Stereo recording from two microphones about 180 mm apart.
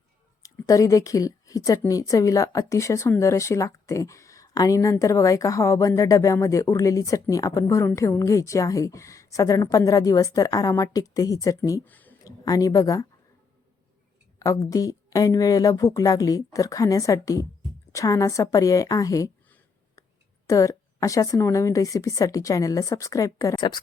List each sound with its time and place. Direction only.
0.4 s a woman's voice: 20° left (ahead or behind)
12.2 s speech: 20° left (ahead or behind)
14.3 s a woman's voice: 20° left (ahead or behind)